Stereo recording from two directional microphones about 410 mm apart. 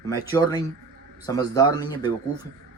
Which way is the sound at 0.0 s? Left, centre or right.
Centre.